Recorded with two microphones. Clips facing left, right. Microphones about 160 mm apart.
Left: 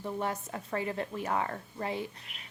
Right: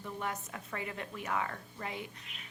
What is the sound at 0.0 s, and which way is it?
A woman's voice, 35° left (ahead or behind).